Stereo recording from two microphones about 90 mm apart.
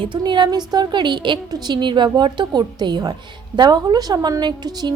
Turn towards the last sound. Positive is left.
turn(degrees=-50)  # may be behind; listen again after turning